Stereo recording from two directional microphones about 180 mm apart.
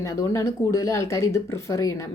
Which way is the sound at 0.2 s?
15° left (ahead or behind).